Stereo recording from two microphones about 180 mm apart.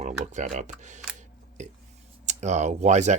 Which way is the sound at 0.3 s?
45° right (ahead or behind).